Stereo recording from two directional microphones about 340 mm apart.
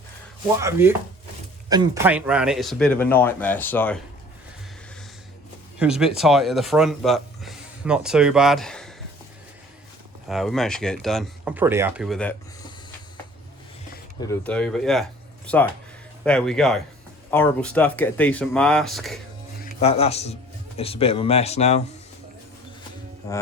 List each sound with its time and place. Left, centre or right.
0.6 s speech: centre
5.8 s speech: centre
10.2 s speech: centre
14.2 s speech: centre
16.2 s speech: centre
19.8 s speech: centre
23.2 s speech: centre